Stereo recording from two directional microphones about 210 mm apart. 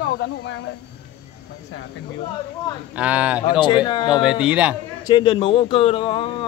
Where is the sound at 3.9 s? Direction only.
20° left (ahead or behind).